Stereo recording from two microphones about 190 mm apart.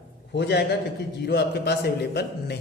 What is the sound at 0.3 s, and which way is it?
A man's voice, 60° left (ahead or behind).